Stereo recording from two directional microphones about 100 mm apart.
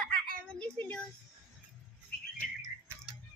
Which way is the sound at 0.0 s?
10° left (ahead or behind).